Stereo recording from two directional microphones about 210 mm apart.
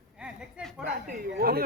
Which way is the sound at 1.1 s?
45° right (ahead or behind).